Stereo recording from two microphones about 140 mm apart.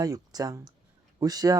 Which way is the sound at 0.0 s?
25° right (ahead or behind).